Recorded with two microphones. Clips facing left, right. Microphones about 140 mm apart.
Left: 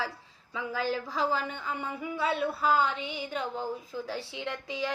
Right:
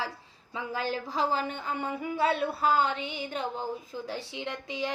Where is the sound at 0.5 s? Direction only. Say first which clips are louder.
Left 1 dB; 20° right (ahead or behind).